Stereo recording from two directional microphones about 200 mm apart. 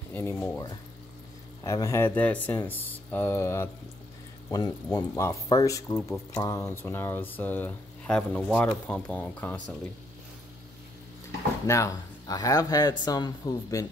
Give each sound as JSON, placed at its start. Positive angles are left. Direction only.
{"t": 0.1, "sound": "speech", "side_deg": 10}
{"t": 11.6, "sound": "speech", "side_deg": 15}